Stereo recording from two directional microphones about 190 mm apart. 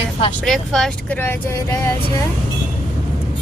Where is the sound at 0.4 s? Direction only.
Centre (ahead or behind).